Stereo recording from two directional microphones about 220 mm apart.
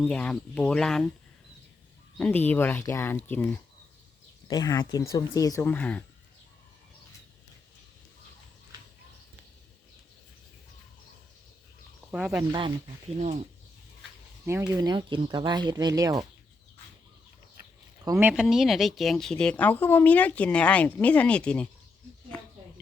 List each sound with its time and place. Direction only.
0.0 s speech: 5° left (ahead or behind)
2.1 s speech: 5° left (ahead or behind)
12.1 s speech: centre (ahead or behind)
12.5 s speech: 20° right (ahead or behind)
14.4 s speech: 15° right (ahead or behind)
18.0 s speech: 10° right (ahead or behind); by 21.7 s 5° left (ahead or behind)